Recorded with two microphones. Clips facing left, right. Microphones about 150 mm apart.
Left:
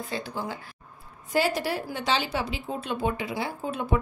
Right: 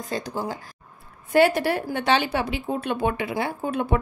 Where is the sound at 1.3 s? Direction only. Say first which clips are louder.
Right 7 dB; 60° right (ahead or behind).